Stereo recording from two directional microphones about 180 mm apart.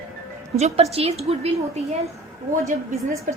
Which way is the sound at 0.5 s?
35° right (ahead or behind).